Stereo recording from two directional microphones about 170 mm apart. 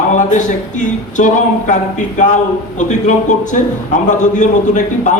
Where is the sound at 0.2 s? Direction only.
45° left (ahead or behind).